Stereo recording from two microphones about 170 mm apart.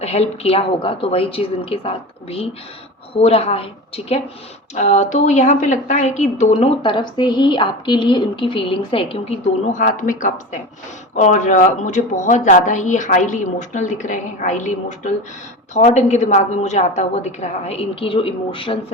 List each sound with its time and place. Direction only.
0.0 s a woman's voice: 40° left (ahead or behind)
6.8 s a woman's voice: 25° left (ahead or behind)